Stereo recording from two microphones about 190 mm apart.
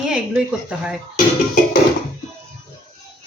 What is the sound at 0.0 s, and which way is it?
Speech, 5° right (ahead or behind).